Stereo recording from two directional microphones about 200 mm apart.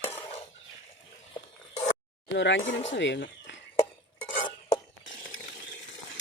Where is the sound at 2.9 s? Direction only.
65° left (ahead or behind).